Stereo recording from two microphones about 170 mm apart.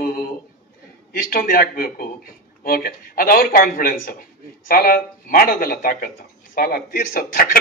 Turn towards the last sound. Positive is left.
turn(degrees=60)  # may be behind; listen again after turning